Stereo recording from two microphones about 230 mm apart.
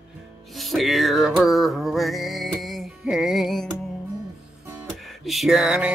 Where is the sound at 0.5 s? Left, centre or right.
Centre.